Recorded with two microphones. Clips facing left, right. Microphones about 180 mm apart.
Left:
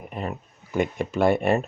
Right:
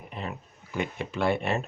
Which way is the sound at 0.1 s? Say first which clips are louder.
Left 5 dB; 45° left (ahead or behind).